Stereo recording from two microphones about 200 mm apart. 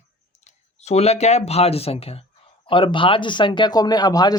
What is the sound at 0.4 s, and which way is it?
Speech, 35° left (ahead or behind).